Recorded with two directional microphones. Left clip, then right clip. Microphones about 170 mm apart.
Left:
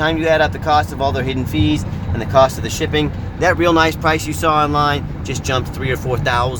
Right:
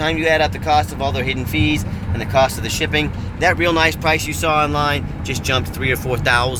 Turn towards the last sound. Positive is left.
turn(degrees=10)  # may be behind; listen again after turning